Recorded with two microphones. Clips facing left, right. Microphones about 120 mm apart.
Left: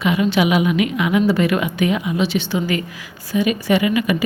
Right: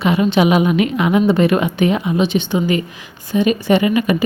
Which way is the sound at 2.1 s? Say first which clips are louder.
Right 3 dB; 20° right (ahead or behind).